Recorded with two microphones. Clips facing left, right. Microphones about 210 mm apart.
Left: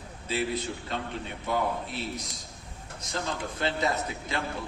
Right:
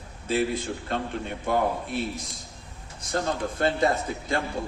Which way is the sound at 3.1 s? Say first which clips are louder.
Right 6 dB; 50° right (ahead or behind).